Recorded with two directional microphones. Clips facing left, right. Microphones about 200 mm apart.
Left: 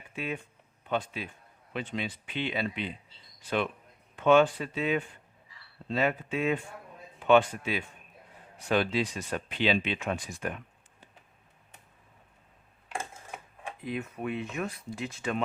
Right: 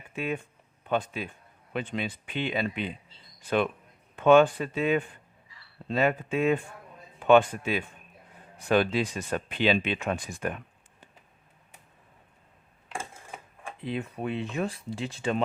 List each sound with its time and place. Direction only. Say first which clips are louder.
0.9 s speech: right 3 dB; 50° right (ahead or behind)
4.2 s speech: right 3 dB; 50° right (ahead or behind)
13.8 s speech: right 2 dB; 30° right (ahead or behind)